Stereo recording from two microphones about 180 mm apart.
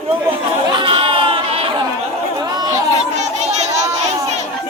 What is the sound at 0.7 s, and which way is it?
Chatter, 30° right (ahead or behind).